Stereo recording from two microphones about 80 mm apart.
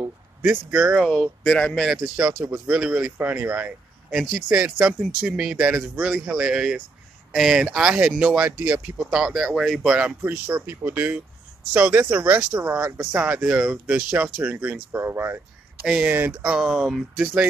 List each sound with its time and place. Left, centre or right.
0.0 s speech: right
1.0 s speech: centre
2.1 s speech: centre
4.4 s speech: right
9.0 s speech: centre
10.2 s speech: right
14.9 s speech: right